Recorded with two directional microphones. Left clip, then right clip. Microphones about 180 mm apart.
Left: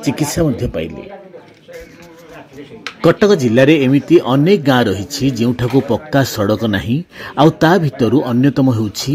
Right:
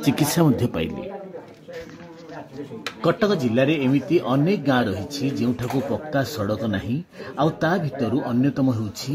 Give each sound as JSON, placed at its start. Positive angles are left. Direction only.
{"t": 0.0, "sound": "speech", "side_deg": -10}
{"t": 3.0, "sound": "speech", "side_deg": 20}